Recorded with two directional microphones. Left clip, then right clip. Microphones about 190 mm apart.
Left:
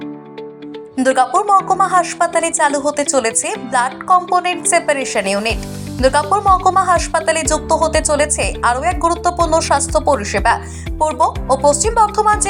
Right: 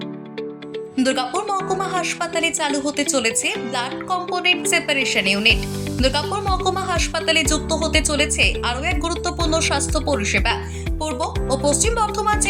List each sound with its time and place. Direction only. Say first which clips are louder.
0.9 s speech: left 8 dB; 15° left (ahead or behind)